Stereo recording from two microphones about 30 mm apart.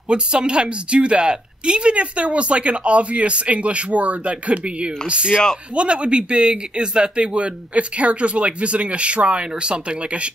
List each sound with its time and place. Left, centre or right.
0.1 s a woman's voice: right